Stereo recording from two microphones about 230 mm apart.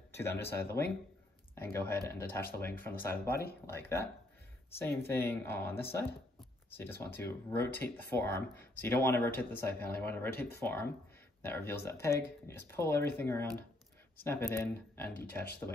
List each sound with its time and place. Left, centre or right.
0.1 s speech: centre
3.3 s speech: left
3.6 s speech: centre